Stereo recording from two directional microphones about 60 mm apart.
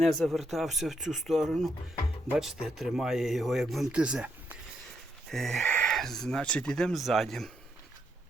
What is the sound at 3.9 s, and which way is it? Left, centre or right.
Speech, centre.